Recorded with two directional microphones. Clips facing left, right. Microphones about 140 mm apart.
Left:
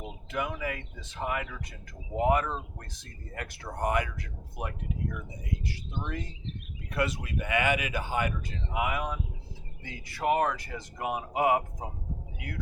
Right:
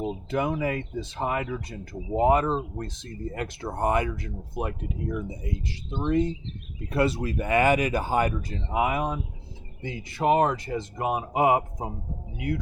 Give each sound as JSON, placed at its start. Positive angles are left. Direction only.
{"t": 0.0, "sound": "speech", "side_deg": -35}